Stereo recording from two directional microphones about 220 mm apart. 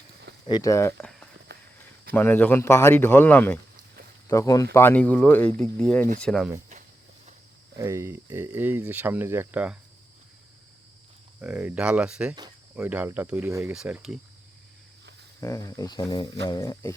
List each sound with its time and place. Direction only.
0.4 s speech: 20° left (ahead or behind)
1.5 s walk: 45° right (ahead or behind)
2.1 s speech: 10° left (ahead or behind)
7.8 s speech: 10° right (ahead or behind)
11.3 s speech: 5° right (ahead or behind)
15.4 s speech: 15° left (ahead or behind)